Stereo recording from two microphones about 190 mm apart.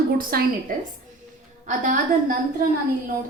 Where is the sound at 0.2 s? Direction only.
50° right (ahead or behind).